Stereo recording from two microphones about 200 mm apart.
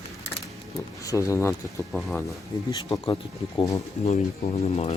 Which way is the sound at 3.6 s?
15° left (ahead or behind).